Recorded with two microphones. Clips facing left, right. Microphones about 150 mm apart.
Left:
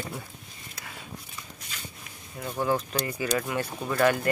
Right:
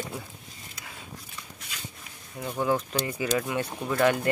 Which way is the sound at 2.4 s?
5° right (ahead or behind).